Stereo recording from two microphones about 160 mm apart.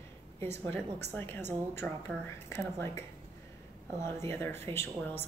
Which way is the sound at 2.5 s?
15° left (ahead or behind).